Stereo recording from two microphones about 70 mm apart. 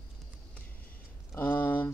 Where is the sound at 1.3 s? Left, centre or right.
Left.